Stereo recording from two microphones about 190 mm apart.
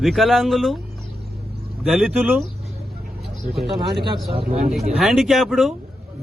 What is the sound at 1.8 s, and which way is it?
Speech, centre (ahead or behind).